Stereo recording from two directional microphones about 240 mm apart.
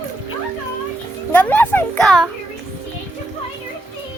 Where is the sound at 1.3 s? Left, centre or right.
Centre.